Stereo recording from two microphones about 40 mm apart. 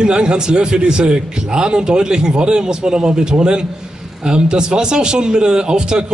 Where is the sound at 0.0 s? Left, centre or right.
Right.